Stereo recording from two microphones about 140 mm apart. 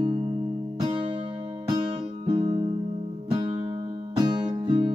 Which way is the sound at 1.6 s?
30° right (ahead or behind).